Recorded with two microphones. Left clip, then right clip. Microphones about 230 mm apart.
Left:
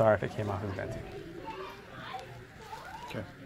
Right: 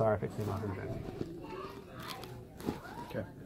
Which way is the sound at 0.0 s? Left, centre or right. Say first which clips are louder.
Left 6 dB; left.